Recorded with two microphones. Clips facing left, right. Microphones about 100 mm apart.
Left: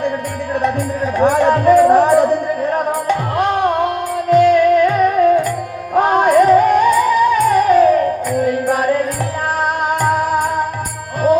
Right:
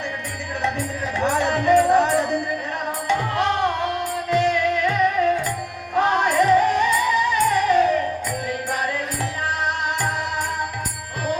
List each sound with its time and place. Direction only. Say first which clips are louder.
1.2 s music: left 8 dB; 45° left (ahead or behind)
10.0 s music: left 9 dB; 50° left (ahead or behind)